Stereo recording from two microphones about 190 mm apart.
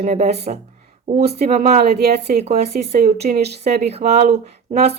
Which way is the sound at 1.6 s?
55° right (ahead or behind).